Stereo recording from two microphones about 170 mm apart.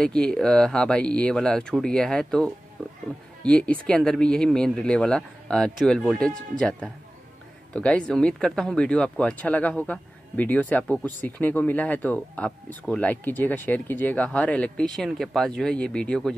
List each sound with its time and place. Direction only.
0.0 s speech: 5° left (ahead or behind)